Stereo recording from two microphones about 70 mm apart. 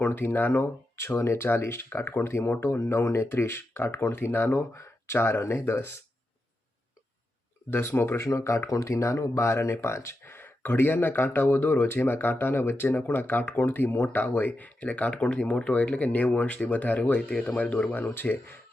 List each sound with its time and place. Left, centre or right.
0.0 s speech: left
7.7 s speech: left